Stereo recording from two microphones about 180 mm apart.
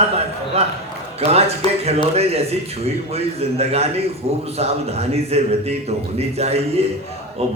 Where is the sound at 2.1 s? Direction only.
35° right (ahead or behind).